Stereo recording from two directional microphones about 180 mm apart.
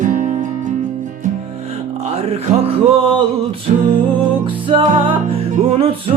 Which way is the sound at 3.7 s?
40° right (ahead or behind).